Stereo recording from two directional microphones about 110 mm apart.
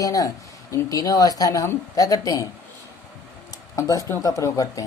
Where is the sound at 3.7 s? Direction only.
30° left (ahead or behind).